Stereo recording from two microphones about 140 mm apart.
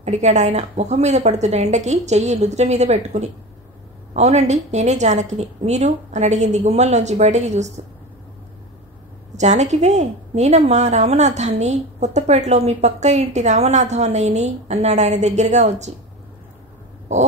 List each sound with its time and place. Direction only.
0.0 s a woman's voice: 55° right (ahead or behind)
9.4 s a woman's voice: 55° right (ahead or behind)